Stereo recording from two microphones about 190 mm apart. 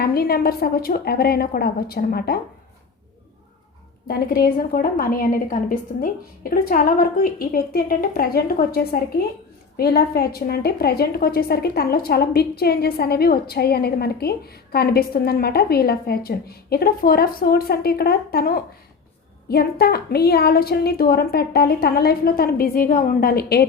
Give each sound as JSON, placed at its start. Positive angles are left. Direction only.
{"t": 0.0, "sound": "a woman's voice", "side_deg": 55}
{"t": 4.1, "sound": "a woman's voice", "side_deg": 50}